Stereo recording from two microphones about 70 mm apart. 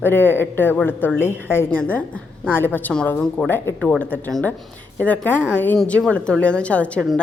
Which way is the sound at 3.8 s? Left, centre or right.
Centre.